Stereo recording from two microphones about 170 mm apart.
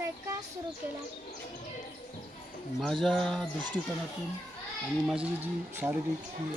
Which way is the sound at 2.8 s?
Centre (ahead or behind).